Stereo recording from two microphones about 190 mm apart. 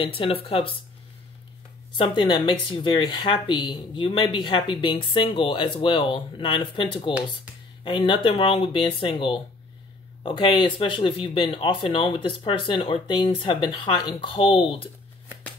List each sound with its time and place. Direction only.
0.0 s speech: 30° left (ahead or behind)
2.0 s speech: 25° left (ahead or behind)